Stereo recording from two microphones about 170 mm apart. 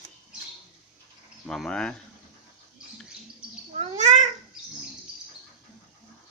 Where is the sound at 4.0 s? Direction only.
45° right (ahead or behind).